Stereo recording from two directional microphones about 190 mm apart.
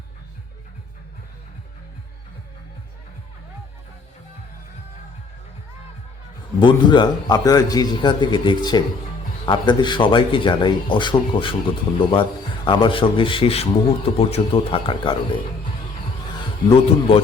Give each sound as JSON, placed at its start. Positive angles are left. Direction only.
{"t": 6.6, "sound": "speech", "side_deg": 25}